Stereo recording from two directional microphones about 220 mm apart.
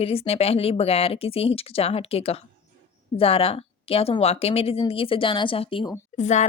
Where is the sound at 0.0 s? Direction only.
25° left (ahead or behind).